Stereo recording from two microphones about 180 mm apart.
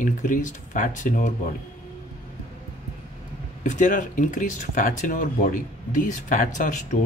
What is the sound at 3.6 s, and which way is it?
Speech, 45° left (ahead or behind).